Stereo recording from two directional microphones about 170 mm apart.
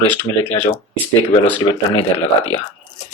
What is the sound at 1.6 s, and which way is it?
Speech, 25° left (ahead or behind).